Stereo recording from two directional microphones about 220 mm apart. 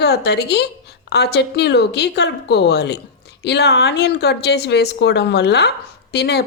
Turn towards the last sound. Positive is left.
turn(degrees=50)  # may be behind; listen again after turning